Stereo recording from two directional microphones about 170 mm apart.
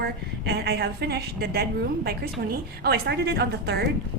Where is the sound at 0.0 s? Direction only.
75° right (ahead or behind).